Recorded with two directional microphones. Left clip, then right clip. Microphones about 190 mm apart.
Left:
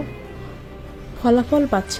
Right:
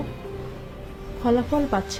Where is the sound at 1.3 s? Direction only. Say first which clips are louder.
Left 5 dB; 30° left (ahead or behind).